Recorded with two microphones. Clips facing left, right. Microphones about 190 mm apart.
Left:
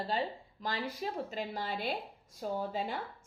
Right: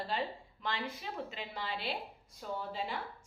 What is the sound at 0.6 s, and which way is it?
Speech, 40° left (ahead or behind).